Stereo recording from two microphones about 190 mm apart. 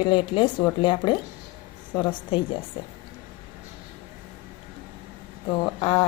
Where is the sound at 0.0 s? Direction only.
25° left (ahead or behind).